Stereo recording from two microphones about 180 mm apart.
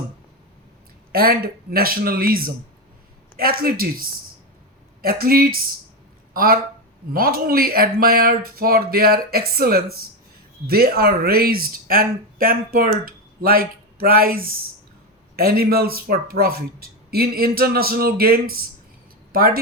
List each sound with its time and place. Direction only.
1.1 s speech: 55° right (ahead or behind)